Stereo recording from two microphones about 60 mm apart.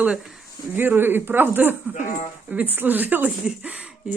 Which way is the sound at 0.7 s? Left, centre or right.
Right.